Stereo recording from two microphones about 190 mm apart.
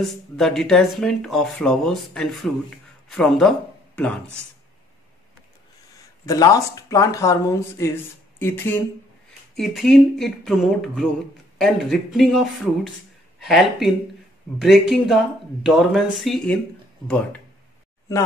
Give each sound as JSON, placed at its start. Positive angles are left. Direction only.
{"t": 0.0, "sound": "speech", "side_deg": 0}
{"t": 6.2, "sound": "speech", "side_deg": 20}